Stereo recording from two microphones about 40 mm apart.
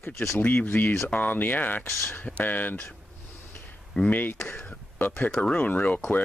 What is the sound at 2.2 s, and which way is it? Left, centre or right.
Speech, left.